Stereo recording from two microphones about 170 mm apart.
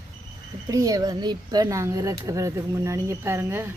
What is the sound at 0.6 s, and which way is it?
Speech, 20° right (ahead or behind).